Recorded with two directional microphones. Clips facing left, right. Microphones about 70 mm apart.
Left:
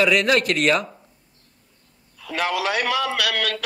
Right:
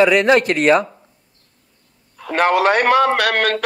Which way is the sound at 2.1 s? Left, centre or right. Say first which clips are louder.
Right 9 dB; right.